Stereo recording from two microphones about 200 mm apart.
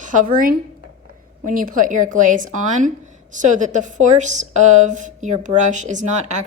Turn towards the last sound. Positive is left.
turn(degrees=-35)  # may be behind; listen again after turning